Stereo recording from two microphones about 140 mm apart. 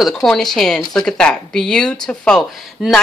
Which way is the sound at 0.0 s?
Centre (ahead or behind).